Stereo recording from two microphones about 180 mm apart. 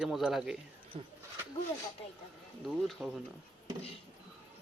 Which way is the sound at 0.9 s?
30° right (ahead or behind).